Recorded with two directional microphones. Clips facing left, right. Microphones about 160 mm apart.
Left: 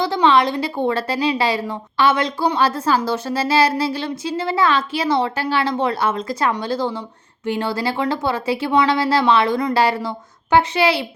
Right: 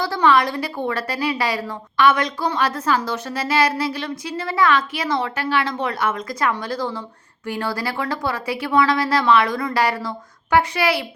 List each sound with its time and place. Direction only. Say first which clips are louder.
0.0 s a woman's voice: left 2 dB; 25° left (ahead or behind)